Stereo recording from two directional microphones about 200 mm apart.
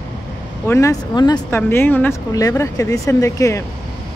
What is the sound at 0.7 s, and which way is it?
Speech, 15° left (ahead or behind).